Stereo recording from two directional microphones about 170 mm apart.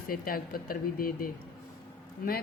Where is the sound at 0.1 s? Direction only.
60° left (ahead or behind).